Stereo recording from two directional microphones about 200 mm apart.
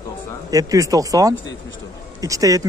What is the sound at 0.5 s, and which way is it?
Speech, 15° right (ahead or behind).